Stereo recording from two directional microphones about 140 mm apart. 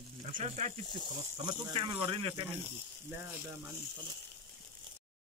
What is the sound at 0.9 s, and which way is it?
Speech, 35° right (ahead or behind).